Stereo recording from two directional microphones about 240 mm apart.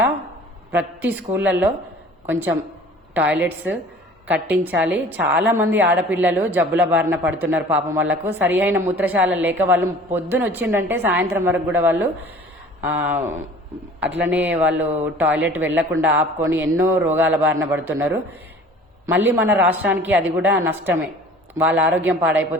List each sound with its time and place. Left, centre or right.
0.7 s a man's voice: centre